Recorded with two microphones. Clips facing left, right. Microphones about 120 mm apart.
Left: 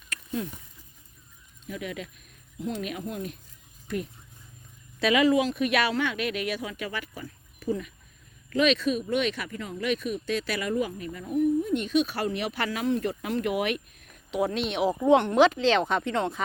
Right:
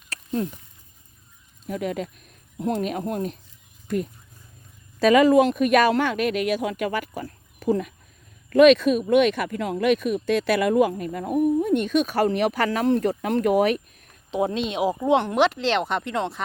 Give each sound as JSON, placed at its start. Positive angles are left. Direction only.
{"t": 0.1, "sound": "a sound", "side_deg": -40}
{"t": 1.6, "sound": "speech", "side_deg": -45}
{"t": 2.6, "sound": "speech", "side_deg": -55}
{"t": 14.3, "sound": "speech", "side_deg": -20}